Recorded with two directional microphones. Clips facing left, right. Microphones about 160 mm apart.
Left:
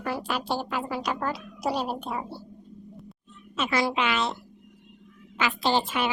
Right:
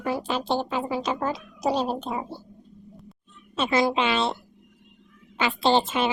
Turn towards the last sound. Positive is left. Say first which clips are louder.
# right 4 dB
turn(degrees=-25)  # may be behind; listen again after turning